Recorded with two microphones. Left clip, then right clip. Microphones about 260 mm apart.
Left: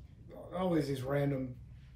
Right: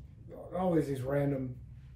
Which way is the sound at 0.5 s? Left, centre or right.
Centre.